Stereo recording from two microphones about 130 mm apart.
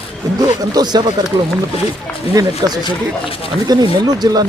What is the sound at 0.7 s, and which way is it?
Speech, 35° right (ahead or behind).